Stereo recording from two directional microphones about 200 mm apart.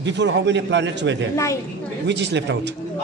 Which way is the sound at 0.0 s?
60° right (ahead or behind).